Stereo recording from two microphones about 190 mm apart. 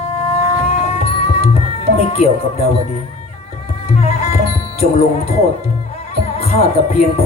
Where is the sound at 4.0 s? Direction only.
35° left (ahead or behind).